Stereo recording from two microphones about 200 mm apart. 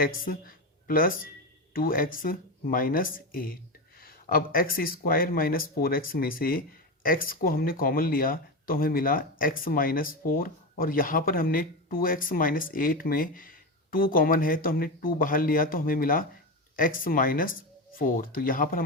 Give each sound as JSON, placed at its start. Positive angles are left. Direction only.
{"t": 0.0, "sound": "speech", "side_deg": 45}